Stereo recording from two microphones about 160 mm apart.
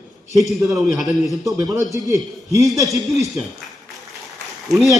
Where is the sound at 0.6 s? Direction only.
15° right (ahead or behind).